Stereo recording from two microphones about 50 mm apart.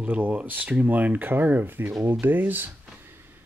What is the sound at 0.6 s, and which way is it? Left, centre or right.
Speech, right.